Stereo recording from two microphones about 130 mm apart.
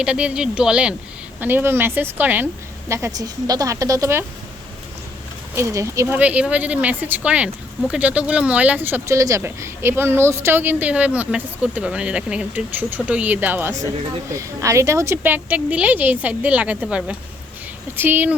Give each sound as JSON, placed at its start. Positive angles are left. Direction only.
{"t": 0.0, "sound": "speech", "side_deg": -10}
{"t": 2.9, "sound": "speech", "side_deg": -25}
{"t": 5.5, "sound": "speech", "side_deg": -25}
{"t": 6.1, "sound": "speech", "side_deg": -10}